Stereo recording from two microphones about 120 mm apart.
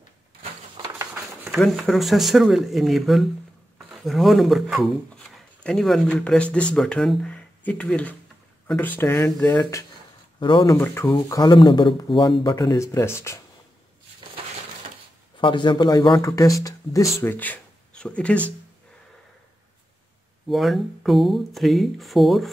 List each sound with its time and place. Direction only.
0.9 s a sound: 15° right (ahead or behind)
1.6 s speech: centre (ahead or behind); by 9.8 s 25° left (ahead or behind)
10.4 s a man's voice: 40° left (ahead or behind)
10.8 s speech: 20° left (ahead or behind)
11.1 s a man's voice: 30° left (ahead or behind)
12.4 s speech: 30° left (ahead or behind)
15.3 s speech: 40° left (ahead or behind); by 18.5 s 10° left (ahead or behind)
20.4 s speech: centre (ahead or behind)